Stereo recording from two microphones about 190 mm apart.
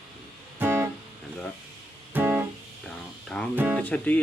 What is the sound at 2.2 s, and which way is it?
Music, 10° right (ahead or behind).